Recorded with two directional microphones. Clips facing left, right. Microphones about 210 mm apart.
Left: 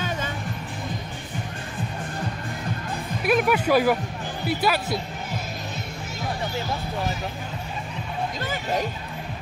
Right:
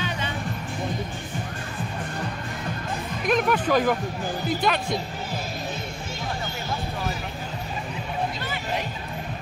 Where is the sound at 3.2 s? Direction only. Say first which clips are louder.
Left 2 dB; 10° left (ahead or behind).